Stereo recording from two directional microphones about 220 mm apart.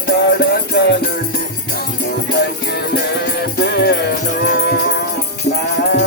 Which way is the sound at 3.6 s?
50° left (ahead or behind).